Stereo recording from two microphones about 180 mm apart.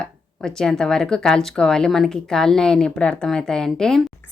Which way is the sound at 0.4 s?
5° left (ahead or behind).